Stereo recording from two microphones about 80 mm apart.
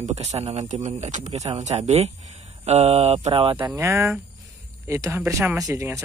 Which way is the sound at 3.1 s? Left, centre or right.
Right.